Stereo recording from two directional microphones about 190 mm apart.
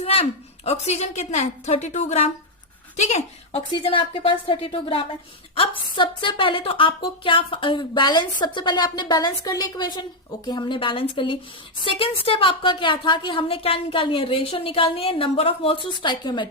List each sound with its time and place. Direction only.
0.0 s a woman's voice: 30° left (ahead or behind)